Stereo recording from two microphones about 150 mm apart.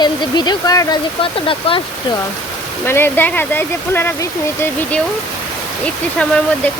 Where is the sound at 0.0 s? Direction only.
30° left (ahead or behind).